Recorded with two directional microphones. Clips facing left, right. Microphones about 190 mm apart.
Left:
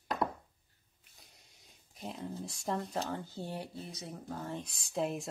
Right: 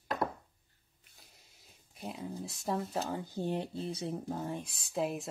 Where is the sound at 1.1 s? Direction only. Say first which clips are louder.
Even; centre (ahead or behind).